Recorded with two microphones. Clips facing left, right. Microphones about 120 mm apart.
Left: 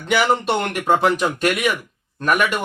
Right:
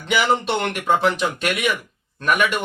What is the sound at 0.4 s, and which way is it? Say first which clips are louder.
Speech: left 2 dB; 45° left (ahead or behind).